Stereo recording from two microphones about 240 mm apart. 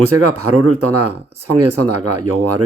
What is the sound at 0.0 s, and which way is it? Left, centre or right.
Speech, right.